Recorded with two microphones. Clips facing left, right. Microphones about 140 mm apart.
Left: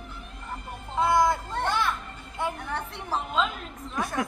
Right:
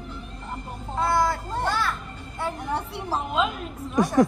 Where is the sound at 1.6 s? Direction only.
20° left (ahead or behind).